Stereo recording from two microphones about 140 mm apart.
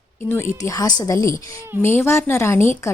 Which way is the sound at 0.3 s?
15° left (ahead or behind).